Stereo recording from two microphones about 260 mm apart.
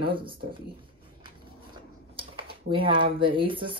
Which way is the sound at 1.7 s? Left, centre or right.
Centre.